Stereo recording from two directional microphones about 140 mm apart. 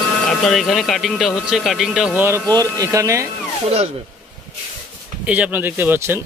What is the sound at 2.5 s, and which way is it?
Speech, 25° right (ahead or behind).